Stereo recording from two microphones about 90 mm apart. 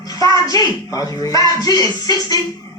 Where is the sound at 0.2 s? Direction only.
45° left (ahead or behind).